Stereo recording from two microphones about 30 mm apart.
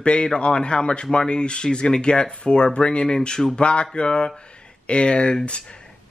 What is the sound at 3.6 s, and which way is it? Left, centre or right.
A man's voice, left.